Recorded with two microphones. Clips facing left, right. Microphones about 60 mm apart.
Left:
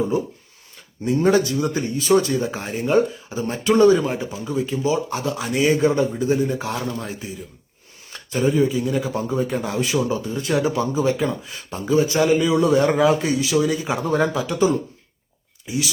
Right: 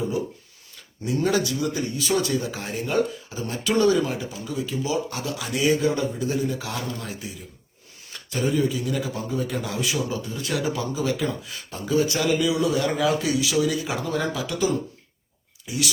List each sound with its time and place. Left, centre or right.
1.0 s speech: left